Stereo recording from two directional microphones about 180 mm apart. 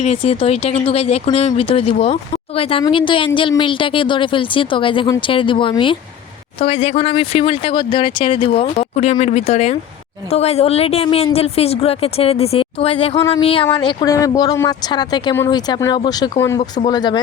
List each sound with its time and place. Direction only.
0.0 s speech: 35° left (ahead or behind)